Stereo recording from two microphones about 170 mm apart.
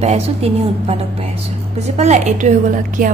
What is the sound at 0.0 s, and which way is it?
Speech, 40° right (ahead or behind).